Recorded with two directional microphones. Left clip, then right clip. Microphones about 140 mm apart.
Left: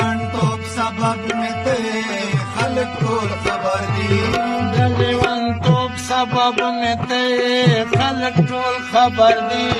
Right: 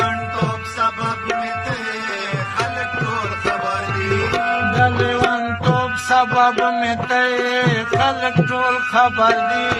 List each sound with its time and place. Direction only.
4.8 s music: 25° left (ahead or behind)
5.3 s tabla: 25° left (ahead or behind)
6.7 s music: 25° left (ahead or behind)